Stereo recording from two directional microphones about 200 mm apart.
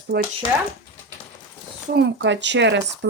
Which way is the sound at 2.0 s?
60° right (ahead or behind).